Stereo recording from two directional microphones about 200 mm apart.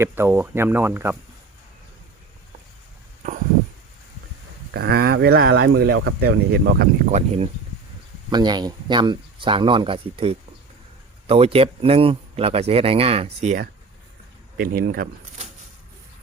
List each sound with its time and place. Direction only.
0.0 s speech: 10° right (ahead or behind)
4.7 s speech: 55° right (ahead or behind)
7.0 s speech: 35° right (ahead or behind)
8.3 s speech: 20° right (ahead or behind)
14.6 s speech: 45° right (ahead or behind)